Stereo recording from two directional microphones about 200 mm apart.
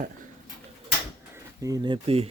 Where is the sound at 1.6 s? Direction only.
20° right (ahead or behind).